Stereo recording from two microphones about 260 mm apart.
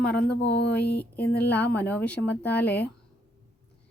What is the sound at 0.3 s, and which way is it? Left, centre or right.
Speech, left.